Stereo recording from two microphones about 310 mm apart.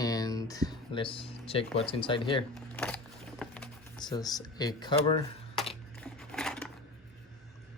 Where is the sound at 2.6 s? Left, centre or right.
Centre.